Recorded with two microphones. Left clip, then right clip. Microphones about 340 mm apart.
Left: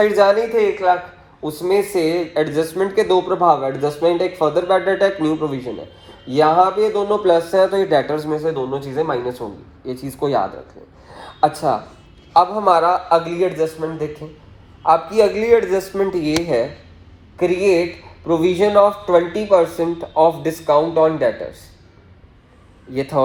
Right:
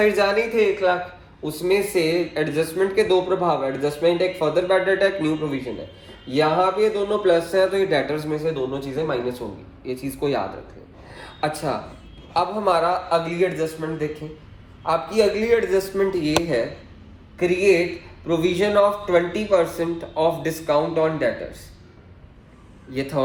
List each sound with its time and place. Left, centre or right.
0.0 s speech: centre
11.1 s a sound: centre
12.3 s speech: centre
23.0 s speech: centre